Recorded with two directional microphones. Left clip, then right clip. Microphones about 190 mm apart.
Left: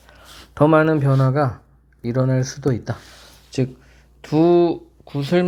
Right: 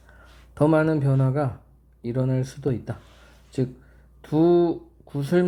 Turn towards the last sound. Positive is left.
turn(degrees=25)  # may be behind; listen again after turning